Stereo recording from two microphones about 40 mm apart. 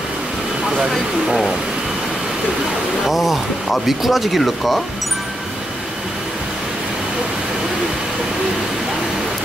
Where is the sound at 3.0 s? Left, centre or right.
Centre.